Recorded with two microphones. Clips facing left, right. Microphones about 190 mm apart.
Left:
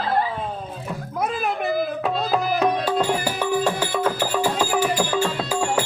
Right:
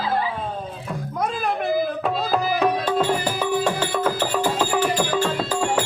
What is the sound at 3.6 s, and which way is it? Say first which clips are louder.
Music: even; 5° left (ahead or behind).